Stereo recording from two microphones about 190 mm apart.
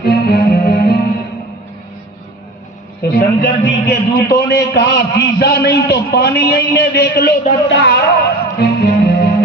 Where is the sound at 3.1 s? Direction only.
55° left (ahead or behind).